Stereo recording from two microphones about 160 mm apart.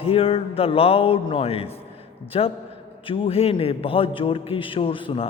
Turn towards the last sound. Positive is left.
turn(degrees=35)  # may be behind; listen again after turning